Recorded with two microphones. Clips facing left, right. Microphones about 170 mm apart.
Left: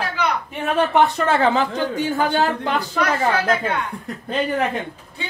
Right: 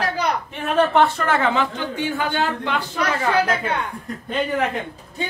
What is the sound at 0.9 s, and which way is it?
Speech, 20° left (ahead or behind).